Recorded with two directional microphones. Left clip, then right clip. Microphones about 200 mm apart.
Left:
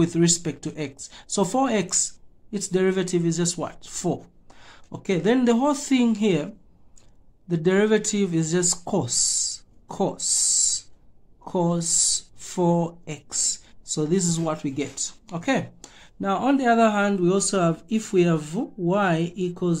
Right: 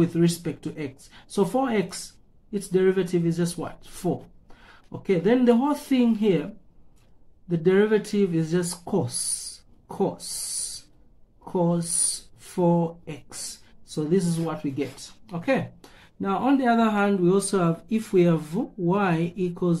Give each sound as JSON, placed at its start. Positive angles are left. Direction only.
{"t": 0.0, "sound": "speech", "side_deg": 40}
{"t": 11.4, "sound": "speech", "side_deg": 40}